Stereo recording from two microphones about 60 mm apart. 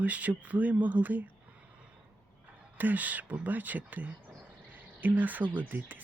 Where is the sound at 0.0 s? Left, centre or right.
Right.